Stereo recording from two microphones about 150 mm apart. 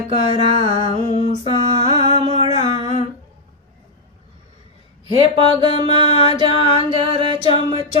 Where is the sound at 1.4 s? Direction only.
30° right (ahead or behind).